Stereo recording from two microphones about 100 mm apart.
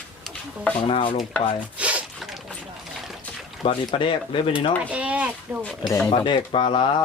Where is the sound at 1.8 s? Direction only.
15° right (ahead or behind).